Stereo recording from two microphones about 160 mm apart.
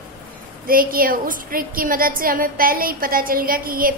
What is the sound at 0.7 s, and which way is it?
A woman's voice, 60° right (ahead or behind).